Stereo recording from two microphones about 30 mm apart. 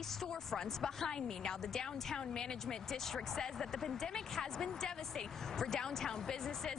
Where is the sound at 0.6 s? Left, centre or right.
Centre.